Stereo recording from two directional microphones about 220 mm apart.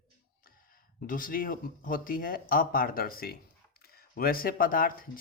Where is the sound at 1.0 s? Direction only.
40° left (ahead or behind).